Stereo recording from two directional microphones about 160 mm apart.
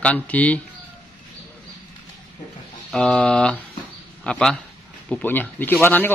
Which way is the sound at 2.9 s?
5° left (ahead or behind).